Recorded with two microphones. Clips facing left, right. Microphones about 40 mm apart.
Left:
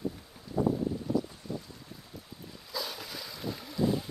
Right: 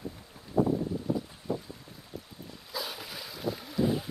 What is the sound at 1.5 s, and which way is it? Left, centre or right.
Boat, right.